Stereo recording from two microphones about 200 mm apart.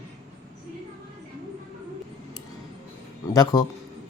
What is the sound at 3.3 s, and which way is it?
Mantra, 20° left (ahead or behind).